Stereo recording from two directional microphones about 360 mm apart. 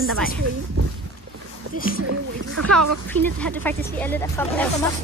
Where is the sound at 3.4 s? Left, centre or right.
Centre.